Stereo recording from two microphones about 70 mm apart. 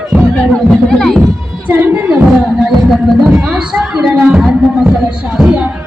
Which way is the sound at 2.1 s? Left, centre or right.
Centre.